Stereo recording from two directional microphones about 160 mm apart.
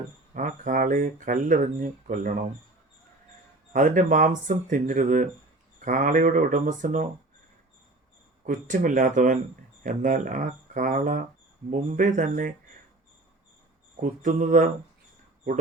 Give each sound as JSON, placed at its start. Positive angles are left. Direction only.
{"t": 0.3, "sound": "speech", "side_deg": -55}
{"t": 3.7, "sound": "speech", "side_deg": -55}
{"t": 8.4, "sound": "speech", "side_deg": -55}
{"t": 13.9, "sound": "speech", "side_deg": -55}